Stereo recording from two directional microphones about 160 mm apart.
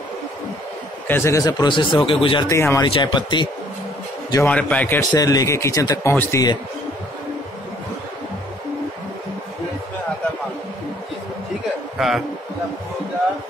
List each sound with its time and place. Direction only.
1.0 s speech: 15° left (ahead or behind); by 2.4 s 35° left (ahead or behind)
2.4 s speech: 20° left (ahead or behind)
2.9 s speech: 30° left (ahead or behind)
4.4 s a man's voice: 10° left (ahead or behind)
5.1 s speech: 25° left (ahead or behind)